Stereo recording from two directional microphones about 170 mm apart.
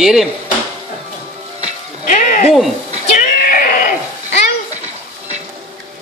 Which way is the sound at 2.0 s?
45° left (ahead or behind).